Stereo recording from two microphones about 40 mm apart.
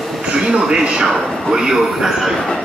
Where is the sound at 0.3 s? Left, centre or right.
Right.